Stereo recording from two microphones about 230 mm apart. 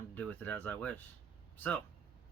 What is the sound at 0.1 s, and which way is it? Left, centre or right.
Speech, centre.